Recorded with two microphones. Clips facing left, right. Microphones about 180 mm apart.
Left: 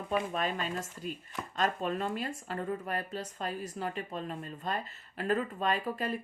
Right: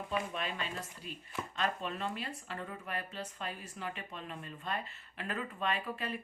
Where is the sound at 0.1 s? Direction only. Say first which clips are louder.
Left 6 dB; 45° left (ahead or behind).